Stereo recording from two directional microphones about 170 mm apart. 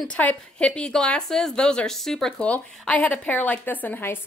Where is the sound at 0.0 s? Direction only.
10° left (ahead or behind).